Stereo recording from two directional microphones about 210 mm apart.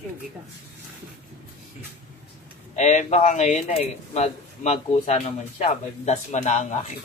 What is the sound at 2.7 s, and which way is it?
Speech, 35° left (ahead or behind).